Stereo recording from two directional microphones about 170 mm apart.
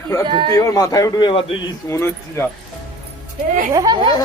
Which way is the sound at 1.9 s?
15° left (ahead or behind).